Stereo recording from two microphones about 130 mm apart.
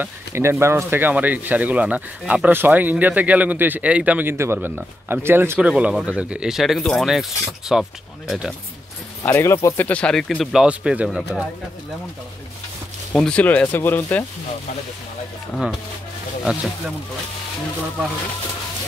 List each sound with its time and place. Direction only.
0.0 s speech: 20° right (ahead or behind); by 8.5 s centre (ahead or behind)
9.2 s speech: 20° left (ahead or behind)
9.8 s speech: 10° left (ahead or behind)
13.1 s speech: 5° left (ahead or behind)